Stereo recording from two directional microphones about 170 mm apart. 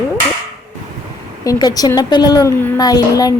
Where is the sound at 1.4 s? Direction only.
20° left (ahead or behind).